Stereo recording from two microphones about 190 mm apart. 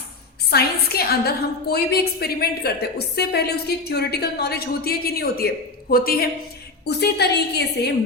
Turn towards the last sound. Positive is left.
turn(degrees=60)  # may be behind; listen again after turning